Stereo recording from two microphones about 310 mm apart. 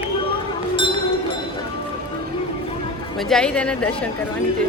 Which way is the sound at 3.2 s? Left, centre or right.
Centre.